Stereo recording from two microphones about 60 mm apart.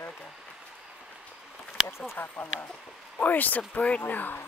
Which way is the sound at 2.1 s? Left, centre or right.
Left.